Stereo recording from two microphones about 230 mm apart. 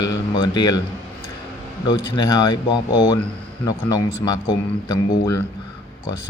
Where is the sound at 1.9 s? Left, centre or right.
Centre.